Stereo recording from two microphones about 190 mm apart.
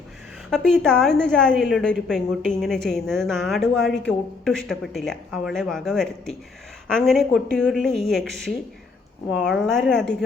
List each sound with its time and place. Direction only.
0.5 s a woman's voice: 5° left (ahead or behind)